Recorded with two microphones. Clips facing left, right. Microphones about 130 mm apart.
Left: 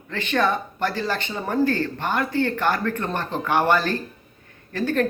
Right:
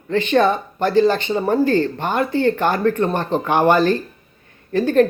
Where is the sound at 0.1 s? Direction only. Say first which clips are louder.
Right 6 dB; 20° right (ahead or behind).